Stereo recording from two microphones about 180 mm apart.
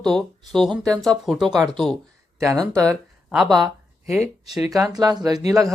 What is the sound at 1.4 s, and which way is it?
Speech, 25° right (ahead or behind).